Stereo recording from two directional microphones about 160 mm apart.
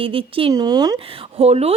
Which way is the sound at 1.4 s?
40° right (ahead or behind).